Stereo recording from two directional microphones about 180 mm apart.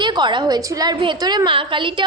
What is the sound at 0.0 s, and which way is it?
A woman's voice, 25° right (ahead or behind).